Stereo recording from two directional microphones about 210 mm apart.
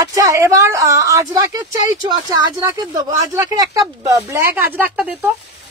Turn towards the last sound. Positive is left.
turn(degrees=-5)  # may be behind; listen again after turning